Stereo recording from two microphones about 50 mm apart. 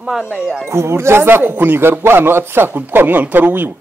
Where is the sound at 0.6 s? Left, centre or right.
Right.